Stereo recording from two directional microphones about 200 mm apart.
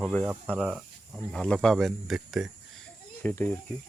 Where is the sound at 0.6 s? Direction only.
5° right (ahead or behind).